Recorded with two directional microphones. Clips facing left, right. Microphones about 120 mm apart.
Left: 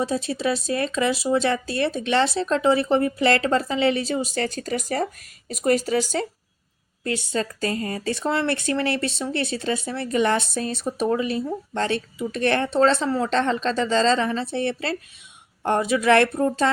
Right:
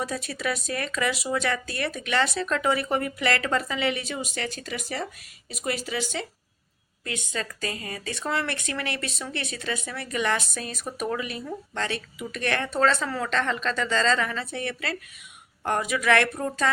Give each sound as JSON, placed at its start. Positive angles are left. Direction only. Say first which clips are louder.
{"t": 0.0, "sound": "speech", "louder": "left 6 dB", "side_deg": 25}